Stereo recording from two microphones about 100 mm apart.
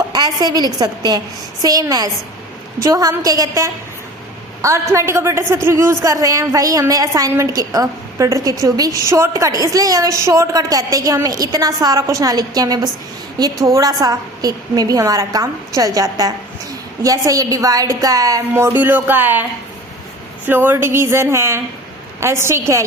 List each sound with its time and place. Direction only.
0.1 s a woman's voice: 40° right (ahead or behind)
18.5 s speech: 20° right (ahead or behind)
20.5 s speech: 20° right (ahead or behind)